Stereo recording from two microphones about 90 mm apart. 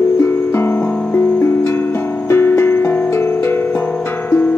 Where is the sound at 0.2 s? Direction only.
25° left (ahead or behind).